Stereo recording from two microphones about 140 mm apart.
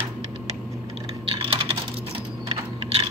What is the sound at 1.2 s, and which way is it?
Typing, 40° right (ahead or behind).